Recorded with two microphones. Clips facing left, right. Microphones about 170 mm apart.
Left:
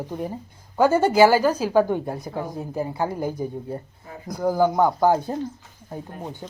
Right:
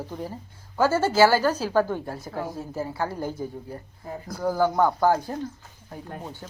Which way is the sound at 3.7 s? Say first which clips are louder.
Left 2 dB; 25° left (ahead or behind).